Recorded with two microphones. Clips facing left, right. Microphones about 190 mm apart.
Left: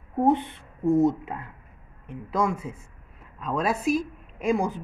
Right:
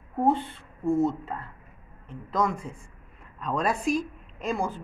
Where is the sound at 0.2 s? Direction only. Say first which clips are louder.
Left 2 dB; 20° left (ahead or behind).